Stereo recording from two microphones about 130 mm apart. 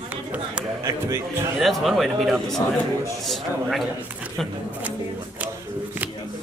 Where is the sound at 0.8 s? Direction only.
20° right (ahead or behind).